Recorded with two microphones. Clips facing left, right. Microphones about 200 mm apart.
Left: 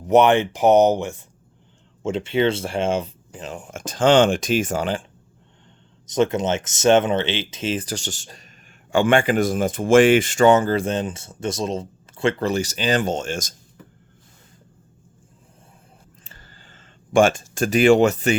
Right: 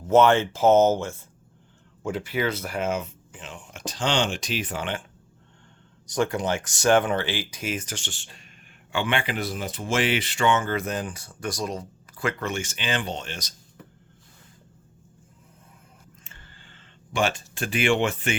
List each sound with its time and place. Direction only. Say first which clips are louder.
0.0 s speech: left 3 dB; 15° left (ahead or behind); by 5.0 s 35° left (ahead or behind)
6.1 s speech: left 5 dB; 20° left (ahead or behind); by 13.5 s 45° left (ahead or behind)
16.2 s a sound: left 2 dB; 35° left (ahead or behind)